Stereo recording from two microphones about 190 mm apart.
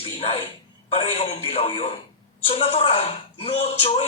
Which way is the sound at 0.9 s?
35° left (ahead or behind).